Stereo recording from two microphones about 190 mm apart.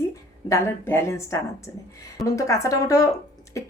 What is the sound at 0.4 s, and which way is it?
A woman's voice, 15° left (ahead or behind).